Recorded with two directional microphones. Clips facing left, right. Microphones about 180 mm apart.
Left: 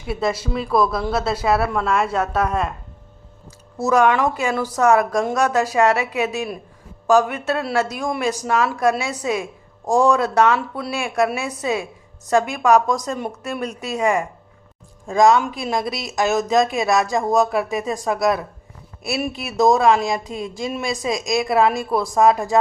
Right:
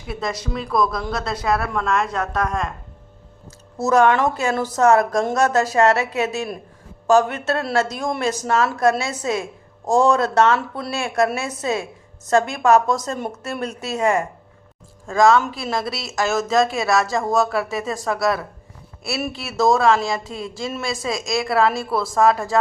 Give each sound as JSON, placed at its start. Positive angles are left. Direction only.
{"t": 0.1, "sound": "speech", "side_deg": 5}
{"t": 3.8, "sound": "speech", "side_deg": 15}